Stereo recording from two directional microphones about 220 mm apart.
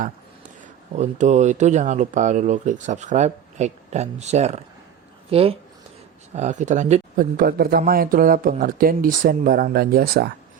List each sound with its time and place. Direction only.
0.9 s speech: 30° right (ahead or behind)